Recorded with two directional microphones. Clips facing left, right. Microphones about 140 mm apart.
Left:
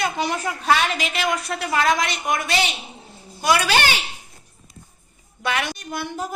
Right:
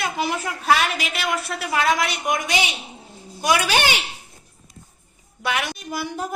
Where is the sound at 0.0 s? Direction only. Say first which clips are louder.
Left 1 dB; 5° right (ahead or behind).